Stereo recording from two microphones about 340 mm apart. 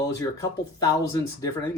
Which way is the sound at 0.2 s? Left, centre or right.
Centre.